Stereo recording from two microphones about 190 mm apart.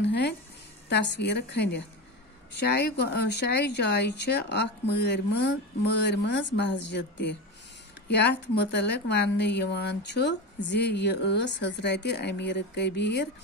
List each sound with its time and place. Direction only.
0.0 s music: 60° left (ahead or behind)
0.8 s speech: 60° left (ahead or behind)